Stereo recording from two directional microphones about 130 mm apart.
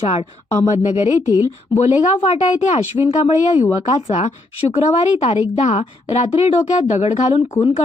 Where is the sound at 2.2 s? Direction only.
60° left (ahead or behind).